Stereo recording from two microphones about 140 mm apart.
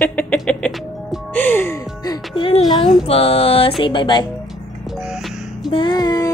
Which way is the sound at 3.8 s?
35° left (ahead or behind).